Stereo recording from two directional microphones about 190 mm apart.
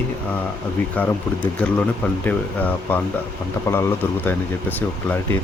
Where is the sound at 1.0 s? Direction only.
10° left (ahead or behind).